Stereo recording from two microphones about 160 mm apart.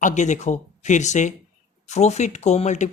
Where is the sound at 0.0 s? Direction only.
50° left (ahead or behind).